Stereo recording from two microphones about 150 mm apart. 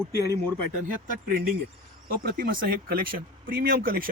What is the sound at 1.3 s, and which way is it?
Speech, 75° right (ahead or behind).